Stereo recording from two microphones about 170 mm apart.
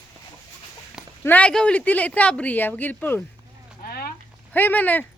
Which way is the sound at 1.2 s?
10° left (ahead or behind).